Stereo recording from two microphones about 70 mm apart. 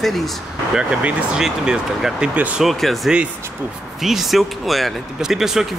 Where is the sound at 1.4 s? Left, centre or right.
Centre.